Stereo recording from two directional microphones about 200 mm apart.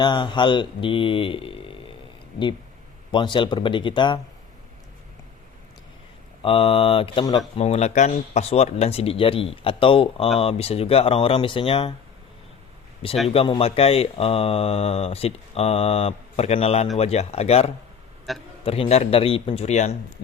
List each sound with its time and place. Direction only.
0.0 s speech: 25° left (ahead or behind)
3.1 s speech: 25° left (ahead or behind)
6.4 s speech: 30° left (ahead or behind)
7.6 s speech: 35° left (ahead or behind)
13.2 s speech: 30° left (ahead or behind)
18.3 s a man's voice: centre (ahead or behind)
18.6 s speech: 30° left (ahead or behind)